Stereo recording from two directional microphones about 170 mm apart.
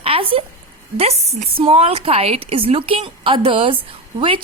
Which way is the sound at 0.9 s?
35° right (ahead or behind).